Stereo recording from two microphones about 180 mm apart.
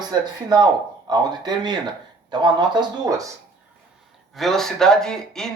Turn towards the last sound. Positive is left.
turn(degrees=5)  # may be behind; listen again after turning